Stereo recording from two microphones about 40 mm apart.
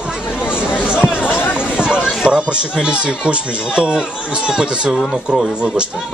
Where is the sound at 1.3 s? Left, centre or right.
Left.